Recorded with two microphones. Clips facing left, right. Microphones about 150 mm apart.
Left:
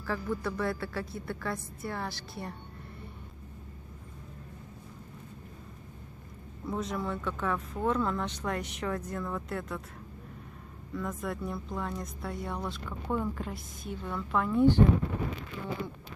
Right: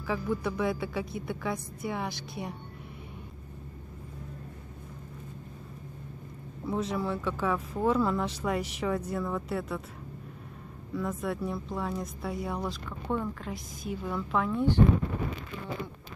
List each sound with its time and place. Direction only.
0.0 s a woman's voice: 15° right (ahead or behind)
6.6 s speech: centre (ahead or behind)
11.0 s speech: 5° right (ahead or behind)